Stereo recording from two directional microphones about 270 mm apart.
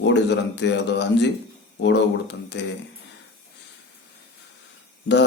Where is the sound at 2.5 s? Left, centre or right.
Left.